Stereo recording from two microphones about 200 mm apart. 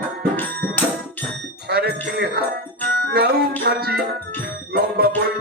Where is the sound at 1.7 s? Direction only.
50° right (ahead or behind).